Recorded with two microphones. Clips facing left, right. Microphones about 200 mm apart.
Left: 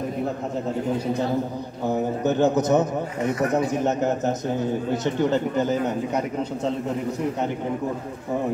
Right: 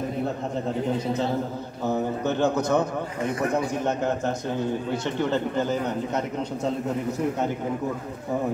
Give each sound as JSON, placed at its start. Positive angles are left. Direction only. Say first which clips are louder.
{"t": 1.9, "sound": "a man's voice", "louder": "left 2 dB", "side_deg": 15}
{"t": 5.2, "sound": "speech", "louder": "left 2 dB", "side_deg": 15}